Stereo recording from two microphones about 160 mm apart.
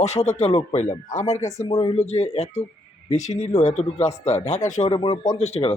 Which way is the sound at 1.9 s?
40° left (ahead or behind).